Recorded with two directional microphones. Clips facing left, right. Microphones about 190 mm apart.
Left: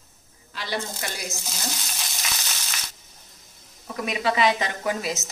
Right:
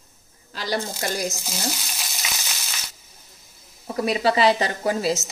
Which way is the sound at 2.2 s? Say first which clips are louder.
Right 1 dB; 5° right (ahead or behind).